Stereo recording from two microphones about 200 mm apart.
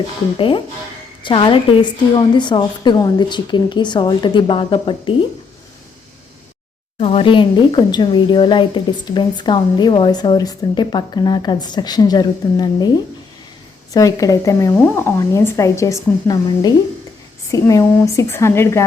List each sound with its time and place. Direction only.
0.3 s speech: 25° left (ahead or behind)
7.0 s speech: 25° left (ahead or behind)